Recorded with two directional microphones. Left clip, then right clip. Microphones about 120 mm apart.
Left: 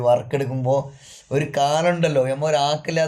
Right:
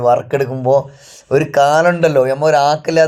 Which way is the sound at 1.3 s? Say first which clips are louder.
Right 9 dB; 50° right (ahead or behind).